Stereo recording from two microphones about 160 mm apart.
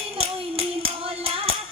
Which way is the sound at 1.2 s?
35° right (ahead or behind).